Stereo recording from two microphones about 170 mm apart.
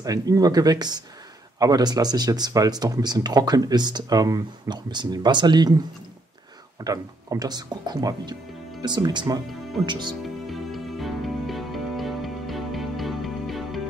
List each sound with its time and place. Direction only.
0.0 s speech: 20° right (ahead or behind)
10.2 s music: centre (ahead or behind)